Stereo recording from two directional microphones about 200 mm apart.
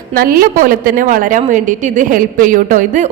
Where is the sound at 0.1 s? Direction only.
45° right (ahead or behind).